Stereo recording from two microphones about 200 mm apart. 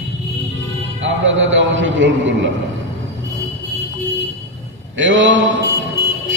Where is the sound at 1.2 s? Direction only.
70° right (ahead or behind).